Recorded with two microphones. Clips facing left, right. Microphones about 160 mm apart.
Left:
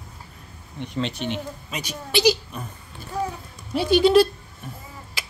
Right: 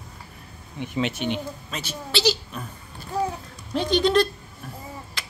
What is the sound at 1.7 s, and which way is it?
Speech, 15° left (ahead or behind).